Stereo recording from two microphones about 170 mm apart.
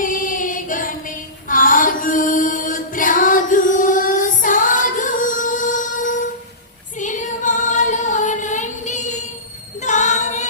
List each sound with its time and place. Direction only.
0.0 s choir: 50° left (ahead or behind)
1.5 s music: 55° left (ahead or behind)
7.0 s female singing: 50° left (ahead or behind)
9.8 s singing: 45° left (ahead or behind)